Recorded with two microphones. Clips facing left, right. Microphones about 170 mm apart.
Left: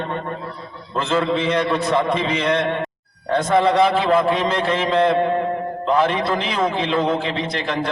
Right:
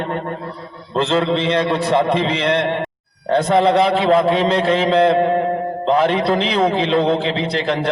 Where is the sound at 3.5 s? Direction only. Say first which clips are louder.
Right 1 dB; 30° right (ahead or behind).